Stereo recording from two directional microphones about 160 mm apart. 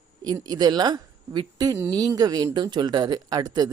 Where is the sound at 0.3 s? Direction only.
25° right (ahead or behind).